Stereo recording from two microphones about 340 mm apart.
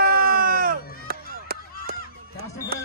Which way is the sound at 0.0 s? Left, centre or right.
Right.